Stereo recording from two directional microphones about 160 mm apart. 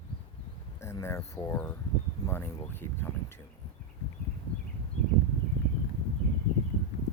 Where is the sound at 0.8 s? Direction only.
15° left (ahead or behind).